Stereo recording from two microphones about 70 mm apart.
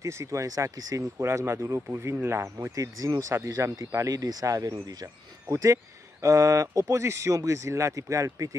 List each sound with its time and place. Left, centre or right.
0.0 s speech: right